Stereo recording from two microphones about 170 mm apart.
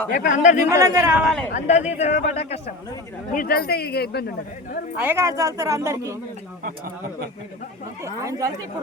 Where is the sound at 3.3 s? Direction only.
60° left (ahead or behind).